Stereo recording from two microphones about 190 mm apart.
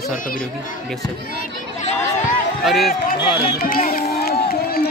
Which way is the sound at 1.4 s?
40° left (ahead or behind).